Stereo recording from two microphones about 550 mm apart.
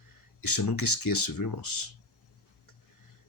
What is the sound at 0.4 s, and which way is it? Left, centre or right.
Speech, left.